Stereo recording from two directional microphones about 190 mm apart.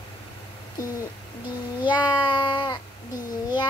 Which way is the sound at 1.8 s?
25° left (ahead or behind).